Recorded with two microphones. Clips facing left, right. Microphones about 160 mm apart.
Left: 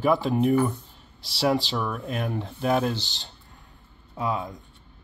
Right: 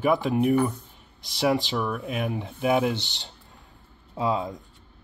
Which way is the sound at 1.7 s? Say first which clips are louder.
Right 1 dB; centre (ahead or behind).